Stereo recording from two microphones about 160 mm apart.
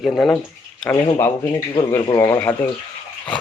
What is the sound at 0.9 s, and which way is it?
Speech, 15° left (ahead or behind).